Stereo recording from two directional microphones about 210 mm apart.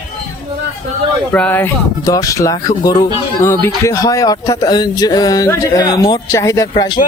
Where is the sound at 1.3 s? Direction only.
5° left (ahead or behind).